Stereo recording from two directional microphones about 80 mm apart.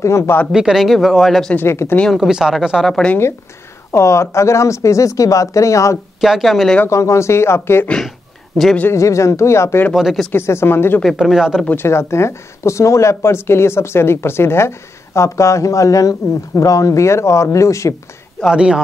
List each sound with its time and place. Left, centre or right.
0.0 s speech: left
0.5 s speech: centre
1.7 s speech: left
2.1 s speech: centre
3.0 s speech: centre
3.9 s speech: left
6.2 s speech: centre
6.9 s speech: left
8.9 s speech: left
9.9 s speech: centre
10.3 s speech: left
11.1 s speech: centre
11.6 s speech: left
18.5 s speech: centre